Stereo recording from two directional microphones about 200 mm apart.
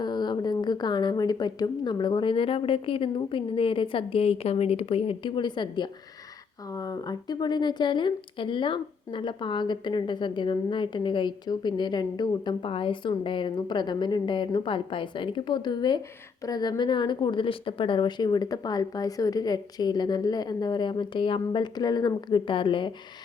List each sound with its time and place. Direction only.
0.0 s speech: 20° left (ahead or behind)